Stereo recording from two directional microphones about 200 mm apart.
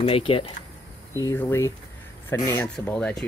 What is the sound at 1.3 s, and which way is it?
Speech, 15° left (ahead or behind).